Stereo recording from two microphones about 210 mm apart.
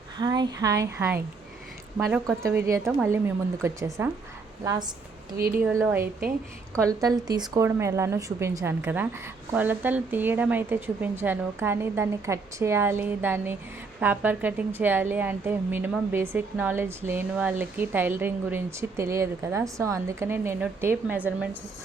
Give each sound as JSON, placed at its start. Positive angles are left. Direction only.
{"t": 0.2, "sound": "a woman's voice", "side_deg": -20}